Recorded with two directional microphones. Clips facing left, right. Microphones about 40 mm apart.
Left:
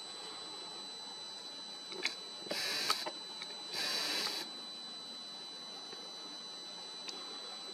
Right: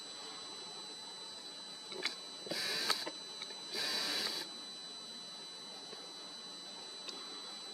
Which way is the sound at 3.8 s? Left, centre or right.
Left.